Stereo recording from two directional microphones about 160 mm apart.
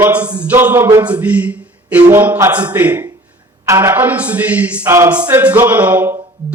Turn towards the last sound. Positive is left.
turn(degrees=-10)  # may be behind; listen again after turning